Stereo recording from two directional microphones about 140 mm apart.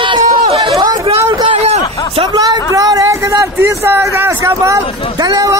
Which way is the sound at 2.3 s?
30° right (ahead or behind).